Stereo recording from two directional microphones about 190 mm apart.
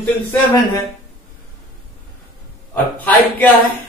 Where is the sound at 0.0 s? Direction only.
15° left (ahead or behind).